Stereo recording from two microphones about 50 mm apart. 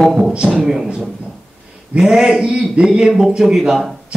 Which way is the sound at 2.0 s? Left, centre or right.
Centre.